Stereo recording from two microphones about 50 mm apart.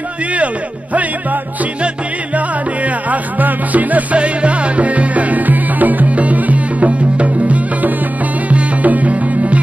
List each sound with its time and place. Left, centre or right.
2.3 s music: right